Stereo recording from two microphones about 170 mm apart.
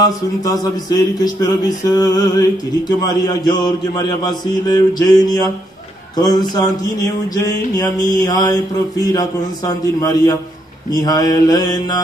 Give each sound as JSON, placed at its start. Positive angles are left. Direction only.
{"t": 0.5, "sound": "speech", "side_deg": 25}